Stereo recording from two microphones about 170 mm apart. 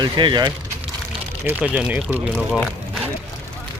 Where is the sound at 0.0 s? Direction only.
25° right (ahead or behind).